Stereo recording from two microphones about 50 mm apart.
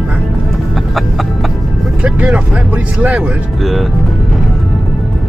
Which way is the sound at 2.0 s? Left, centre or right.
Right.